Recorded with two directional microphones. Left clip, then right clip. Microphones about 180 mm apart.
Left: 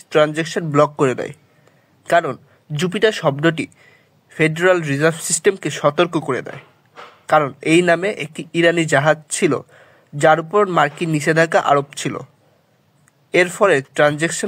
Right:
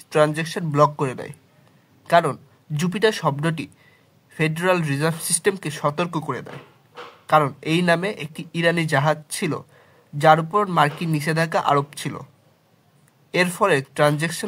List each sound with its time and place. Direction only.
0.1 s a man's voice: 20° left (ahead or behind)
13.3 s speech: 20° left (ahead or behind)